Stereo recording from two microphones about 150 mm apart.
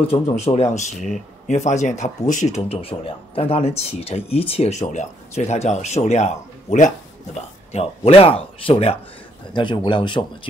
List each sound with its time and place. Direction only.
0.0 s speech: 40° left (ahead or behind)
7.7 s speech: 40° left (ahead or behind)